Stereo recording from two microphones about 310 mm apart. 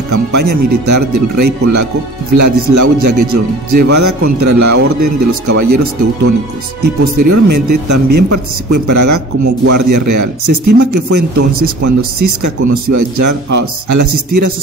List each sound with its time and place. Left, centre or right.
0.1 s speech: right
7.2 s speech: right